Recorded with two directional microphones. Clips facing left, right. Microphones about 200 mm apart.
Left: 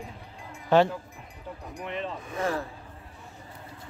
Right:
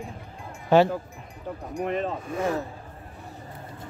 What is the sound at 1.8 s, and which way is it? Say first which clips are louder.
Speech: right 7 dB; 45° right (ahead or behind).